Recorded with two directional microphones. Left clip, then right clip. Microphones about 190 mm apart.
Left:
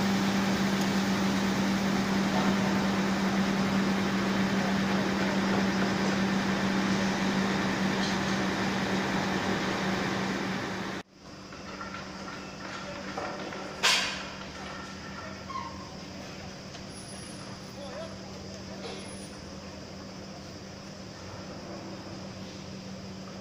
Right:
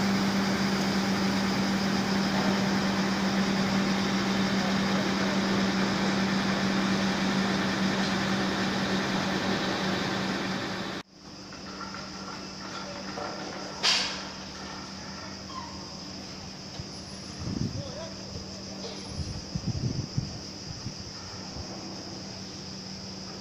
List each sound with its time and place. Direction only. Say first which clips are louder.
0.0 s vehicle: right 1 dB; 40° right (ahead or behind)